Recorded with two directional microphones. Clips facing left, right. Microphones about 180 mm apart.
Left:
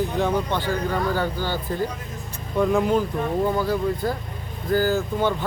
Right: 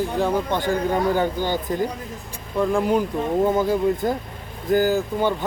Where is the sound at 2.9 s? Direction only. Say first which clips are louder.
Right 1 dB; 20° right (ahead or behind).